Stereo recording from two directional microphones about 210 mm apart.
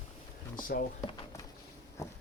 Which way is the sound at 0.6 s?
40° left (ahead or behind).